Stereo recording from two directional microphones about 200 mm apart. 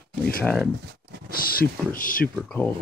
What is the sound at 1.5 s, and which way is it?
Speech, 45° left (ahead or behind).